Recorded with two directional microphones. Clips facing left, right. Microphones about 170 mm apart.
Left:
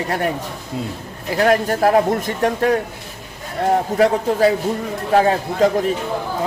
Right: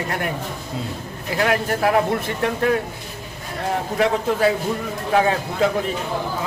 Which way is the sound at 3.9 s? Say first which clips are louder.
Left 1 dB; 35° left (ahead or behind).